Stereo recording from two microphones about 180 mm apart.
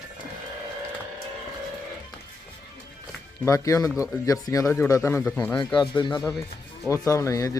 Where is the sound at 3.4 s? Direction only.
15° left (ahead or behind).